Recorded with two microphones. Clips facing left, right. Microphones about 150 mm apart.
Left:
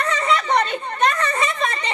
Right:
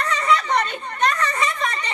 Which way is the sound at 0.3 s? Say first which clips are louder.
Even; 25° left (ahead or behind).